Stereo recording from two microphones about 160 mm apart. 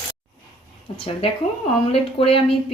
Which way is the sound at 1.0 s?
35° left (ahead or behind).